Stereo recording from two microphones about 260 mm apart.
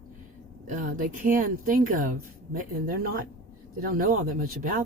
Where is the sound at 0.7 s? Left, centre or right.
Right.